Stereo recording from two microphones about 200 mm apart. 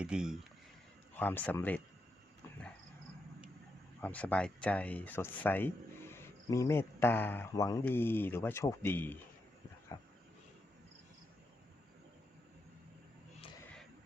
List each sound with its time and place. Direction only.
0.0 s speech: 5° right (ahead or behind)
1.1 s speech: 10° left (ahead or behind)
4.0 s speech: 5° left (ahead or behind)
9.9 s a sound: 20° left (ahead or behind)